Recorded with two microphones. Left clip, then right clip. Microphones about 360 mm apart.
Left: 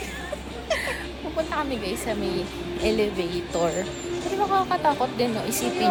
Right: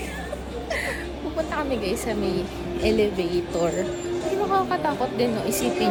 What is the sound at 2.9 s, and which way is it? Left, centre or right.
Speech, centre.